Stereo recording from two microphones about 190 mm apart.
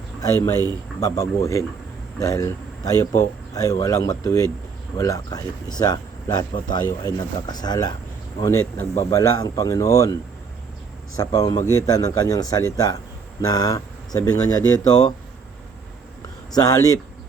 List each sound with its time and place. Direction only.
0.2 s speech: 20° left (ahead or behind)
11.2 s speech: 20° left (ahead or behind)
16.2 s a sound: 20° left (ahead or behind)